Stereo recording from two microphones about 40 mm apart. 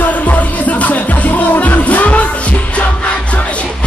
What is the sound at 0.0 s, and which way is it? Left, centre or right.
Music, left.